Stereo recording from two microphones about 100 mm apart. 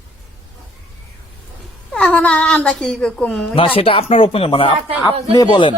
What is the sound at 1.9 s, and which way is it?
Speech, 10° left (ahead or behind).